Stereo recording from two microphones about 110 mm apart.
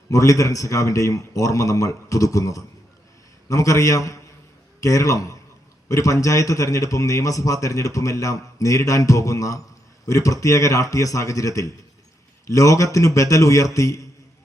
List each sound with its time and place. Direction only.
0.1 s a man's voice: 30° left (ahead or behind)